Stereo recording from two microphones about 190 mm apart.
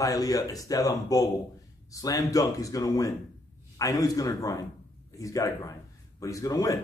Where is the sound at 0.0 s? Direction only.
20° left (ahead or behind).